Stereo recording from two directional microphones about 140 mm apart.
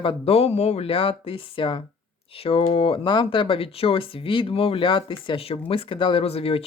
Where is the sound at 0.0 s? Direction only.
40° left (ahead or behind).